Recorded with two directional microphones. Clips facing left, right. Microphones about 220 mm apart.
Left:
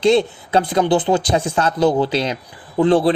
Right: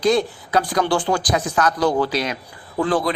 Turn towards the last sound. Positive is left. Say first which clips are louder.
# left 6 dB
turn(degrees=30)  # may be behind; listen again after turning